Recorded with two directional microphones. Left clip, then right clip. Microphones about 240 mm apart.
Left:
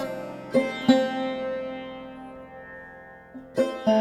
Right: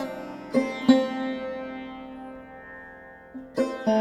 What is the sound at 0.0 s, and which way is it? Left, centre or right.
Music, centre.